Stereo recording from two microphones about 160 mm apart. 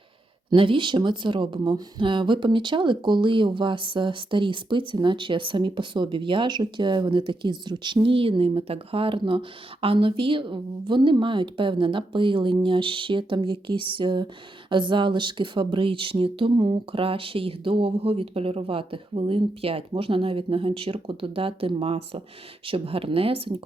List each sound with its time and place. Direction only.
0.5 s speech: 30° right (ahead or behind)